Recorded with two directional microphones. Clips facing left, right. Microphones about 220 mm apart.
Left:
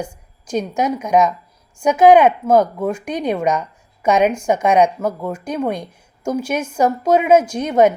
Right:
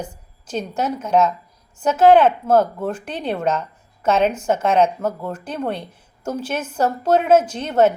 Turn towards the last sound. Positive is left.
turn(degrees=10)  # may be behind; listen again after turning